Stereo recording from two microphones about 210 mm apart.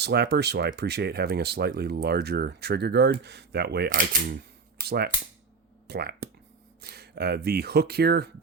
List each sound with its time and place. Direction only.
0.0 s speech: 50° right (ahead or behind)